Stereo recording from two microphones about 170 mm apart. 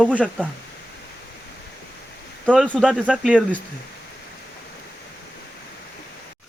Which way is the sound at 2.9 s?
5° right (ahead or behind).